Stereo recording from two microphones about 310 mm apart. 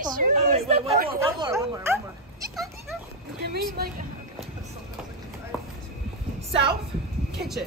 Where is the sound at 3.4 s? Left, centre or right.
Right.